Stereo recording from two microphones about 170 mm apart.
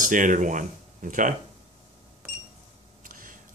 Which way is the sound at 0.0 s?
50° right (ahead or behind).